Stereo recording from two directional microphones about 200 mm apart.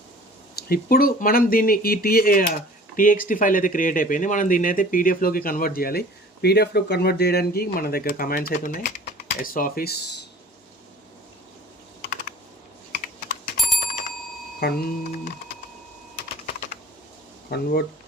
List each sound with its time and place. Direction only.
0.5 s speech: 50° left (ahead or behind)
12.9 s computer keyboard: 45° left (ahead or behind)
14.6 s speech: 50° left (ahead or behind)
17.5 s speech: 55° left (ahead or behind)